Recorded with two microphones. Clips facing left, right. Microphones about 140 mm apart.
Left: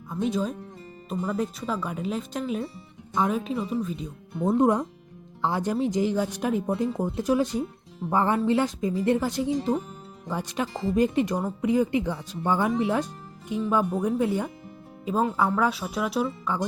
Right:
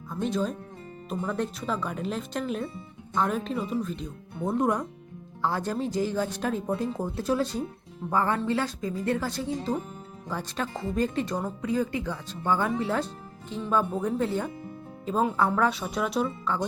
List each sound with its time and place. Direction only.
0.1 s speech: 5° left (ahead or behind)
4.4 s speech: 20° left (ahead or behind); by 16.6 s 5° left (ahead or behind)